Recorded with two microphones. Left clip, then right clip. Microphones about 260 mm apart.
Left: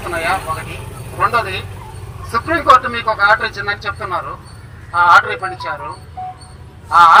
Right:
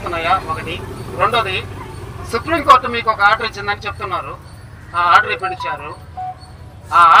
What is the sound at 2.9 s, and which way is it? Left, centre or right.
Speech, right.